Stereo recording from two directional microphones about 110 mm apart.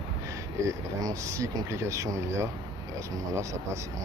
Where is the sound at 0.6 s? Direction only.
30° right (ahead or behind).